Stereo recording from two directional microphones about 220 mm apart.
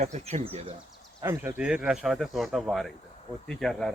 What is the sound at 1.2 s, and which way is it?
Speech, 10° right (ahead or behind).